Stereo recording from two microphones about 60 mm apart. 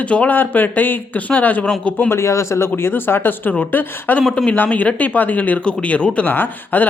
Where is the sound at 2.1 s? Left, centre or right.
Left.